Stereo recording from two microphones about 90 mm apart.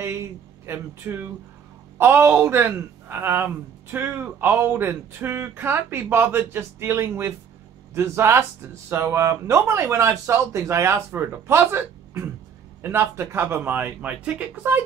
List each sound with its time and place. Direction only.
0.0 s speech: 30° right (ahead or behind); by 14.6 s 15° right (ahead or behind)